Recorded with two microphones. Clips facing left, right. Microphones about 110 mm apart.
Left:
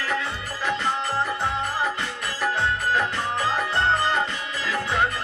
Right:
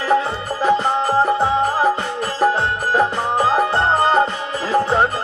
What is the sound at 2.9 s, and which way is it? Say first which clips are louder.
Music: right 7 dB; 40° right (ahead or behind).